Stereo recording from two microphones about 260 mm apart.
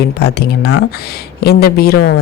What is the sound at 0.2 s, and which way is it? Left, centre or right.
Speech, left.